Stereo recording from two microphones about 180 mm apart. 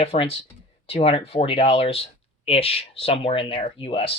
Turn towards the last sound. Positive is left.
turn(degrees=30)  # may be behind; listen again after turning